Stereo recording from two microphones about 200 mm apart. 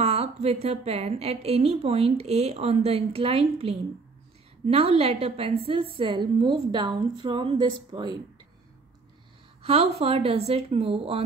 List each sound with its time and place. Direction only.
0.0 s a woman's voice: 30° right (ahead or behind)
9.6 s a woman's voice: 30° right (ahead or behind)